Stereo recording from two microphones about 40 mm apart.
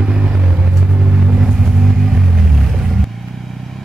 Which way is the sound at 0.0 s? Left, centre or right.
Centre.